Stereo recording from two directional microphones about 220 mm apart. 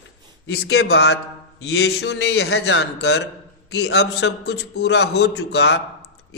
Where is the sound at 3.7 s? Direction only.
50° left (ahead or behind).